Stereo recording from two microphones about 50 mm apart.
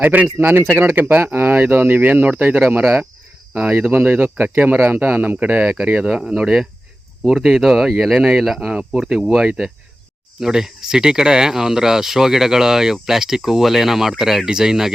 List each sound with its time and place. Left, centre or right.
0.0 s speech: right
1.5 s speech: right
6.3 s speech: centre
8.6 s speech: centre
10.4 s speech: centre